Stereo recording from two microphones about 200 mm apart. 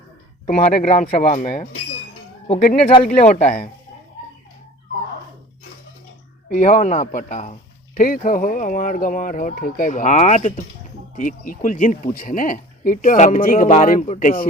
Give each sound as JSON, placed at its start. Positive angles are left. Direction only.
{"t": 0.4, "sound": "speech", "side_deg": 35}
{"t": 6.5, "sound": "speech", "side_deg": 40}